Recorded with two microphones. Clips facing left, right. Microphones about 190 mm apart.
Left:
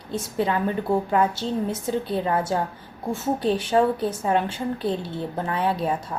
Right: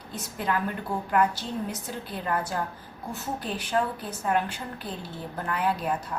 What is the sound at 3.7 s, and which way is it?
A woman's voice, 25° left (ahead or behind).